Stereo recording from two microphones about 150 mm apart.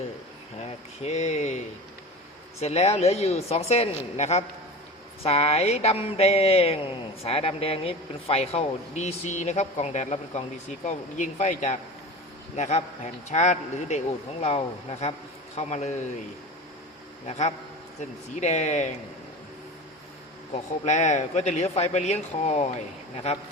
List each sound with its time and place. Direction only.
1.0 s speech: 50° left (ahead or behind)
2.6 s speech: 45° left (ahead or behind)
17.2 s speech: 50° left (ahead or behind)
20.5 s speech: 50° left (ahead or behind)